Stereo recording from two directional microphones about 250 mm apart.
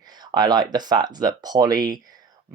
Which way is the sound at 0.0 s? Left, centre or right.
Centre.